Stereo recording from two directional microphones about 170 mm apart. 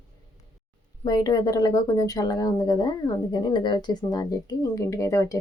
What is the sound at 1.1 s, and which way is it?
Speech, 20° left (ahead or behind).